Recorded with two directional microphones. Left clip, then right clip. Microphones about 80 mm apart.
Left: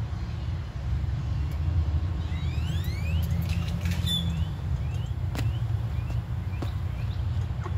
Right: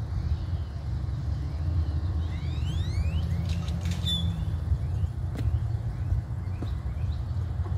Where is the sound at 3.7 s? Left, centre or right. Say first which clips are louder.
Right 1 dB; centre.